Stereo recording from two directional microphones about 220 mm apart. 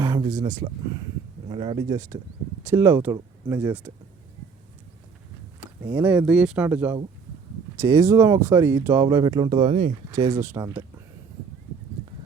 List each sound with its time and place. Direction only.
0.0 s a sound: 15° right (ahead or behind)
0.4 s speech: 15° right (ahead or behind)
5.9 s speech: 10° right (ahead or behind); by 9.9 s 30° right (ahead or behind)
10.1 s speech: 15° right (ahead or behind)